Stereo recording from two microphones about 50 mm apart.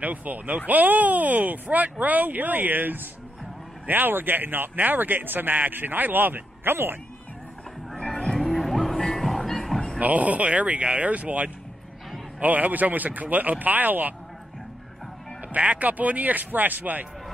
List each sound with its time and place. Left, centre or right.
0.0 s speech: right
8.0 s music: centre
9.9 s speech: right
15.5 s speech: right